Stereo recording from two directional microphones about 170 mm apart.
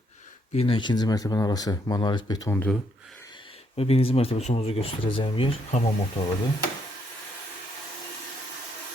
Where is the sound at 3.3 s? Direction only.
35° left (ahead or behind).